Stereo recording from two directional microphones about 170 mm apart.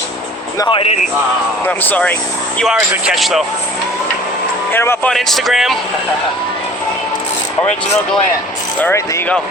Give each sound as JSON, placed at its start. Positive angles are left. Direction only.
{"t": 0.6, "sound": "speech", "side_deg": 30}
{"t": 1.6, "sound": "speech", "side_deg": 10}
{"t": 2.6, "sound": "speech", "side_deg": 0}
{"t": 4.7, "sound": "speech", "side_deg": 15}
{"t": 5.1, "sound": "speech", "side_deg": 0}
{"t": 8.8, "sound": "speech", "side_deg": 10}